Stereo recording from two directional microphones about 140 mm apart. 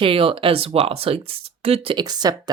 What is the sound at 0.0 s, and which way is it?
Speech, 40° right (ahead or behind).